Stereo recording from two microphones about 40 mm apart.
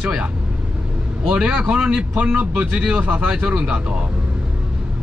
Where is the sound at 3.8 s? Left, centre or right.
Right.